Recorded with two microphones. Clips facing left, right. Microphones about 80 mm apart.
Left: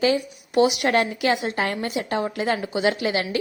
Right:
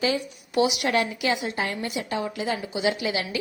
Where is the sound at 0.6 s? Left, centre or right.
Left.